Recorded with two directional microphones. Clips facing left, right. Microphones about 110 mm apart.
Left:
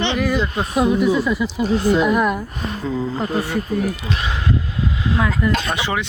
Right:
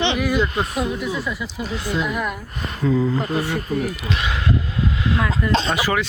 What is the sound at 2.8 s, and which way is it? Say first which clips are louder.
Speech: right 4 dB; 30° left (ahead or behind).